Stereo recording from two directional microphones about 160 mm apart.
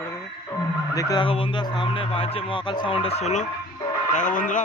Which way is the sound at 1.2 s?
35° left (ahead or behind).